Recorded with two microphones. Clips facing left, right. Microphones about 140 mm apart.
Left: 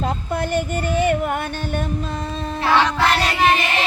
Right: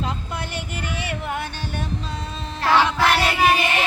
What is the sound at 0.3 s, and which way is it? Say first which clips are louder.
Child singing: left 9 dB; 50° left (ahead or behind).